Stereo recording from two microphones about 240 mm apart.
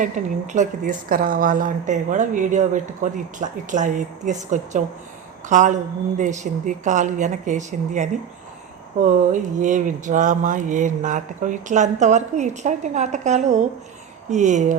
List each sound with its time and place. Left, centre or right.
0.2 s speech: right